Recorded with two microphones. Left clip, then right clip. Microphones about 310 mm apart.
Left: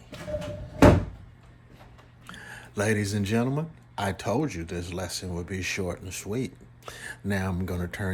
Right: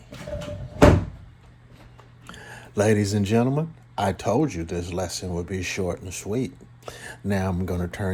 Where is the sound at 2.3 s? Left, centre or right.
Centre.